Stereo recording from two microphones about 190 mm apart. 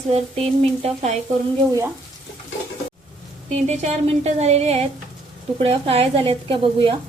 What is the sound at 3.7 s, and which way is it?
A woman's voice, 35° right (ahead or behind).